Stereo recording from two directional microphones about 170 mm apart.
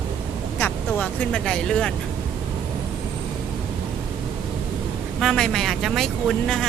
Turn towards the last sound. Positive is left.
turn(degrees=0)  # may be behind; listen again after turning